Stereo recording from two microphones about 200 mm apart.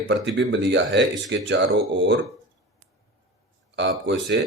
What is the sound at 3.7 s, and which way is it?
Speech, 65° right (ahead or behind).